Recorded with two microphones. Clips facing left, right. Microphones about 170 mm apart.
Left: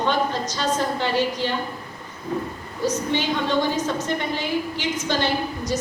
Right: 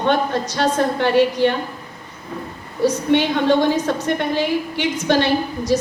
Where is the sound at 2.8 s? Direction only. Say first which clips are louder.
Right 7 dB; 65° right (ahead or behind).